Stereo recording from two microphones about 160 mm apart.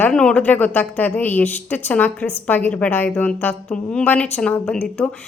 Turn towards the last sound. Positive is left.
turn(degrees=5)  # may be behind; listen again after turning